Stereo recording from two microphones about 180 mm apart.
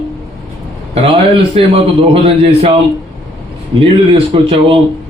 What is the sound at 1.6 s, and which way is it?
Speech, 35° right (ahead or behind).